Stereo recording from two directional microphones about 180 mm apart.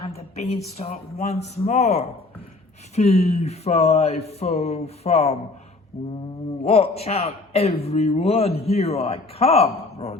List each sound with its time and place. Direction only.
0.1 s a woman's voice: 35° left (ahead or behind)
5.9 s mantra: 20° left (ahead or behind)
6.7 s a man's voice: 35° left (ahead or behind)